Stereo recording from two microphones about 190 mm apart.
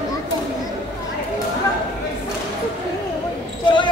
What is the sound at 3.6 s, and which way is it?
Basketball bounce, 25° left (ahead or behind).